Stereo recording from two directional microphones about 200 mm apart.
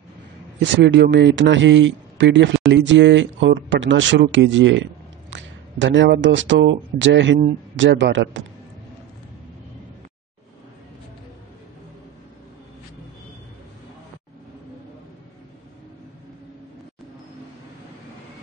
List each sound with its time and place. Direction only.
0.6 s a man's voice: 65° right (ahead or behind)